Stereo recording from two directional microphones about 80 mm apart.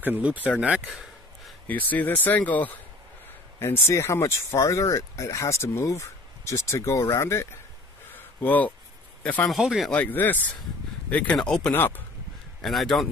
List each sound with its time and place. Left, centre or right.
0.0 s speech: right
1.7 s speech: left
3.5 s speech: left
8.1 s a sound: left
9.2 s a man's voice: centre
9.5 s speech: centre
9.8 s speech: centre
12.6 s speech: centre